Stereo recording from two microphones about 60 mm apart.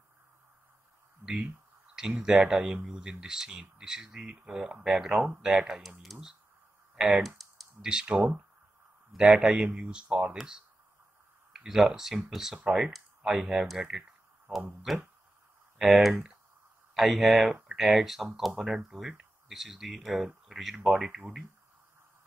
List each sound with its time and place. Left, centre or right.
1.2 s a sound: right
2.0 s speech: centre
6.1 s speech: centre
7.0 s speech: centre
7.2 s typing: centre
7.8 s speech: centre
11.5 s speech: centre